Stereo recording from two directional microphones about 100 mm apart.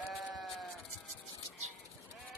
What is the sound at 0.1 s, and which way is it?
Sheep, centre (ahead or behind).